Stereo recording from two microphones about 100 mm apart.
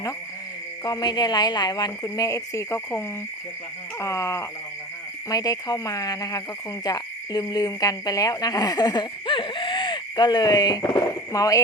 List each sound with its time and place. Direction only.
0.9 s speech: 45° left (ahead or behind)
4.0 s speech: 30° left (ahead or behind)